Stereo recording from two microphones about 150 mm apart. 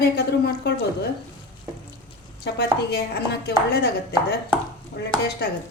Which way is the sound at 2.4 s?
90° left.